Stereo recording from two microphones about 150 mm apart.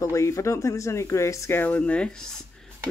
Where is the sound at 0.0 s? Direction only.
20° left (ahead or behind).